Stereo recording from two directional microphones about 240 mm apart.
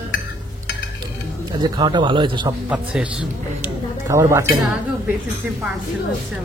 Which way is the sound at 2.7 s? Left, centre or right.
Centre.